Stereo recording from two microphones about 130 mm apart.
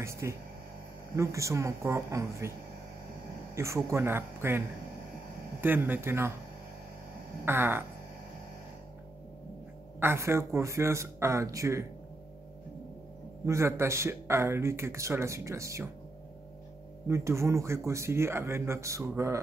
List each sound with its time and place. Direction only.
0.0 s speech: 20° right (ahead or behind)
3.5 s speech: 20° right (ahead or behind)
7.4 s speech: 15° right (ahead or behind)
9.9 s speech: 20° right (ahead or behind)
13.5 s speech: 20° right (ahead or behind)
17.1 s speech: 20° right (ahead or behind)